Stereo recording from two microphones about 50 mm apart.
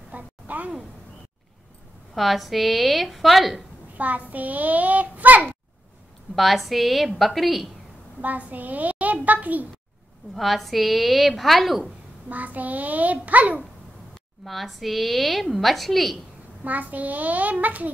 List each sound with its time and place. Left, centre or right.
0.1 s a sound: right
2.1 s a woman's voice: centre
4.0 s a child's voice: right
6.3 s a woman's voice: centre
8.2 s a child's voice: right
10.3 s a woman's voice: centre
12.3 s a child's voice: right
14.4 s a woman's voice: centre
16.6 s a child's voice: right